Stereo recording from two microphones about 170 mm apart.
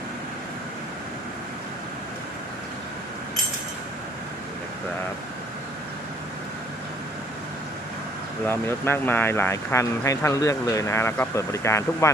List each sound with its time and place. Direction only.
8.4 s speech: 15° left (ahead or behind)